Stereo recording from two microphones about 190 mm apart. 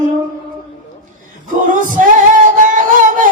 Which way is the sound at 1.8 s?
45° right (ahead or behind).